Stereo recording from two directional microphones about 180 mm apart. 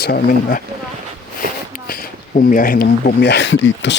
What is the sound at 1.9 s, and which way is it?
Speech, 50° left (ahead or behind).